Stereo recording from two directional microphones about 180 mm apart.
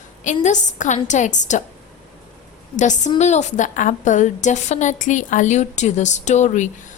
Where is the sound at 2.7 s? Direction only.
40° left (ahead or behind).